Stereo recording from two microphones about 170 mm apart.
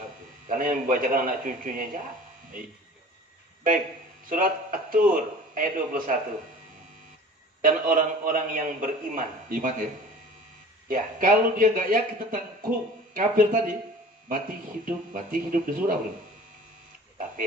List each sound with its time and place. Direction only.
0.5 s a man's voice: 50° right (ahead or behind)
4.3 s a man's voice: 55° right (ahead or behind)
7.6 s a man's voice: 55° right (ahead or behind)
10.9 s a man's voice: 55° right (ahead or behind)